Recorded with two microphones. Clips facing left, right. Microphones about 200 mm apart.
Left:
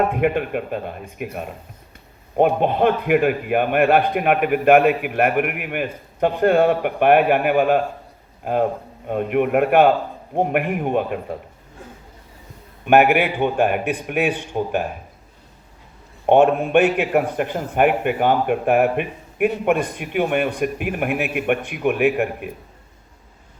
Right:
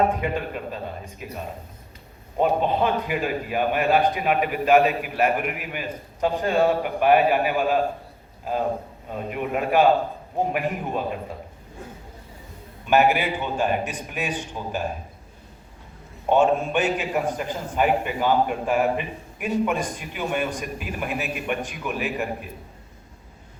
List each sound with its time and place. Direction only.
0.1 s a man's voice: 60° left (ahead or behind)
9.0 s a man's voice: 60° left (ahead or behind)
12.8 s a man's voice: 60° left (ahead or behind)
16.2 s a man's voice: 60° left (ahead or behind)